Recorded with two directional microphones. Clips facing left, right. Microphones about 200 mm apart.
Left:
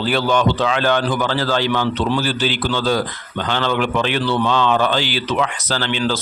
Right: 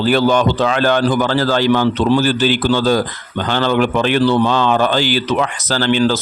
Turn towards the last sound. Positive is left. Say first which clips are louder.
# right 6 dB
turn(degrees=-45)  # may be behind; listen again after turning